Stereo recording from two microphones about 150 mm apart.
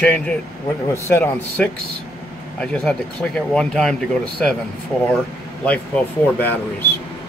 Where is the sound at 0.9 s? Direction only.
15° left (ahead or behind).